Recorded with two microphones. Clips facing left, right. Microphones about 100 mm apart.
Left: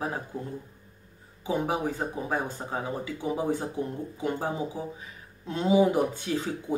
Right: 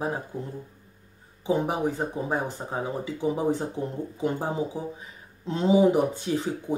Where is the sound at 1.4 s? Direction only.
25° right (ahead or behind).